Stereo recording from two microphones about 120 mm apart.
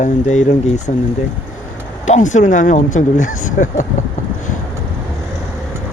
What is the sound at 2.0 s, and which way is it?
Speech, 90° left.